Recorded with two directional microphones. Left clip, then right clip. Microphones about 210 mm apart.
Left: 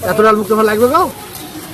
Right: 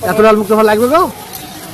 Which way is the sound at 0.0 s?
30° right (ahead or behind).